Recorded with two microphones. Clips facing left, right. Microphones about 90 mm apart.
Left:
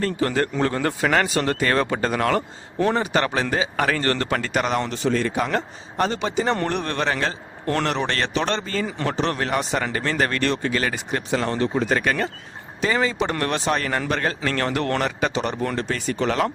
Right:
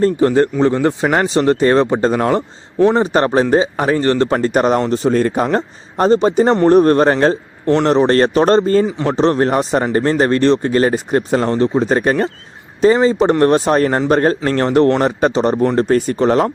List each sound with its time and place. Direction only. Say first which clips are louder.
0.0 s speech: right 10 dB; 25° right (ahead or behind)
4.3 s speech: right 9 dB; 35° right (ahead or behind)
8.9 s a man's voice: right 7 dB; 20° right (ahead or behind)
9.1 s speech: right 11 dB; 35° right (ahead or behind)